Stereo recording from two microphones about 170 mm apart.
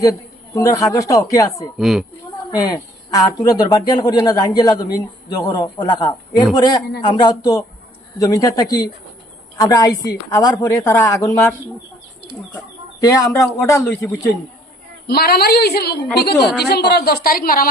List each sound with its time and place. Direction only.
0.0 s speech: 20° left (ahead or behind)
1.8 s a woman's voice: centre (ahead or behind)
2.5 s speech: 20° left (ahead or behind)
13.1 s speech: 20° left (ahead or behind)
15.0 s a woman's voice: 65° left (ahead or behind)
16.4 s a woman's voice: centre (ahead or behind)
16.6 s a woman's voice: 70° left (ahead or behind)